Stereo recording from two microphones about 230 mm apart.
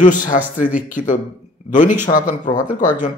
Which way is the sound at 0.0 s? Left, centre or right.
Left.